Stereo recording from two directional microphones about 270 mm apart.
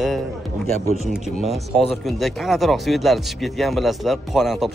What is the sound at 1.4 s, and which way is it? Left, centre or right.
Speech, centre.